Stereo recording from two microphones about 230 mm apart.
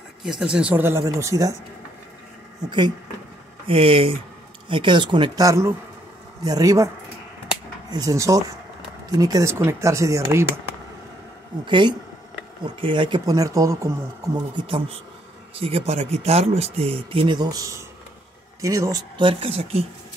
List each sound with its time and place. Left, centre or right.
0.2 s speech: centre
3.6 s speech: right
7.9 s speech: centre
11.6 s speech: centre